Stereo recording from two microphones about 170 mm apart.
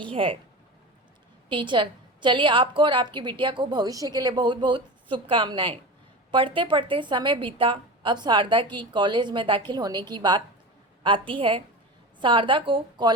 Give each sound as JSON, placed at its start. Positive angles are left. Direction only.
{"t": 0.0, "sound": "speech", "side_deg": -30}
{"t": 1.5, "sound": "a woman's voice", "side_deg": -30}